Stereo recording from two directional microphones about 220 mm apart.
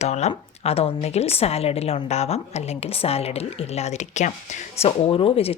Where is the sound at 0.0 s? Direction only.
30° left (ahead or behind).